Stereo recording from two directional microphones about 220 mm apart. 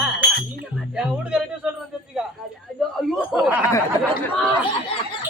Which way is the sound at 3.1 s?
Centre (ahead or behind).